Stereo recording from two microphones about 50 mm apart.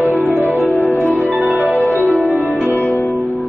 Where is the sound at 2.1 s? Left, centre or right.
Centre.